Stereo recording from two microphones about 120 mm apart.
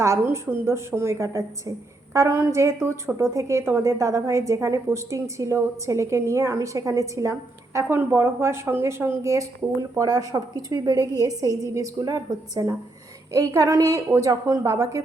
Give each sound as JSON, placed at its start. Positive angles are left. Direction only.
{"t": 0.0, "sound": "a woman's voice", "side_deg": -20}